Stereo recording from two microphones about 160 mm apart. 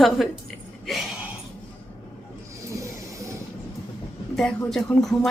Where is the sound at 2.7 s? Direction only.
20° right (ahead or behind).